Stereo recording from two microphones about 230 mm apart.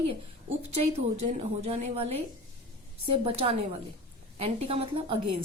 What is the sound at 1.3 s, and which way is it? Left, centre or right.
Speech, right.